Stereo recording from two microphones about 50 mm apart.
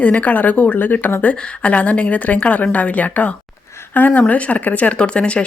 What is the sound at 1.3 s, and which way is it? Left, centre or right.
Speech, left.